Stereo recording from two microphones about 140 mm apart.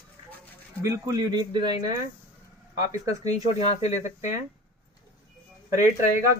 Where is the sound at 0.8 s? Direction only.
20° right (ahead or behind).